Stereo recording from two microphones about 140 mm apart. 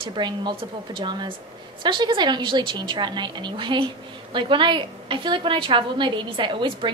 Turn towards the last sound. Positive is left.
turn(degrees=-35)  # may be behind; listen again after turning